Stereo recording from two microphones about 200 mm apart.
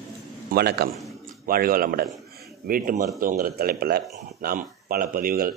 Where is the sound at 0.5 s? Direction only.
50° right (ahead or behind).